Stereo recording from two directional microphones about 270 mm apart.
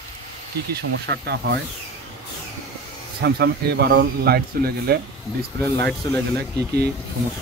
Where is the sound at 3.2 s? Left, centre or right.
Right.